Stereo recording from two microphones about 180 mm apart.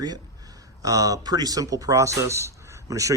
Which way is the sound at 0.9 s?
20° right (ahead or behind).